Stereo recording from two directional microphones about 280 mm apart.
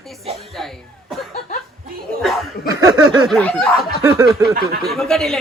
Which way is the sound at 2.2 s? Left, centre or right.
Centre.